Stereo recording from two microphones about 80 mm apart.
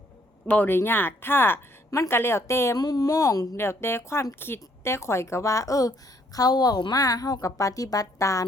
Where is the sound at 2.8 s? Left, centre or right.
Left.